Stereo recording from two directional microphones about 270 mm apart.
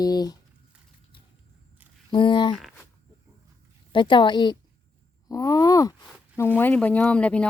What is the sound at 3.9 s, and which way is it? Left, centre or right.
Speech, centre.